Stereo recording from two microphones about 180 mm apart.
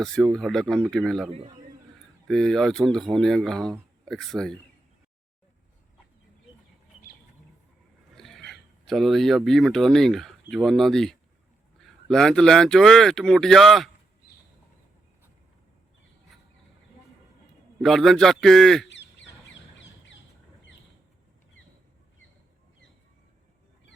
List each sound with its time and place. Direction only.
0.0 s speech: centre (ahead or behind)
1.3 s a man's voice: 35° right (ahead or behind)
2.2 s speech: centre (ahead or behind)
8.1 s a sound: centre (ahead or behind)
8.4 s speech: centre (ahead or behind)
17.7 s speech: centre (ahead or behind)
18.9 s duck: 80° left